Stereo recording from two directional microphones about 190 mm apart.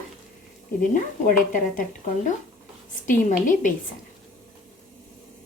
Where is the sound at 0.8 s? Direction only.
45° left (ahead or behind).